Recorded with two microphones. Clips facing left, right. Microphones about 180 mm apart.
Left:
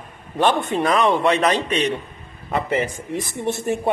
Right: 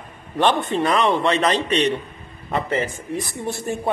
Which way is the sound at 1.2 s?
15° left (ahead or behind).